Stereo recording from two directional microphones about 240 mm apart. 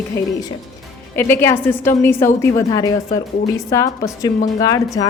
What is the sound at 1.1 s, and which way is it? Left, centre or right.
A woman's voice, centre.